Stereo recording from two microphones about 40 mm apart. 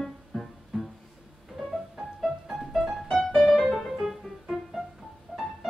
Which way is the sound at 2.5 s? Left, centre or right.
Centre.